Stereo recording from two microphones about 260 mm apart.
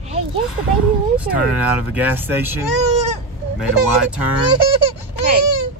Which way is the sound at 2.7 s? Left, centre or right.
Right.